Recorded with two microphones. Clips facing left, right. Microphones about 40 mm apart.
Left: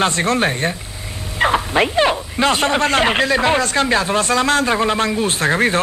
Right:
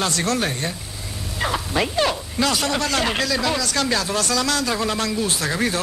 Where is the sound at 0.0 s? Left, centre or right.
Left.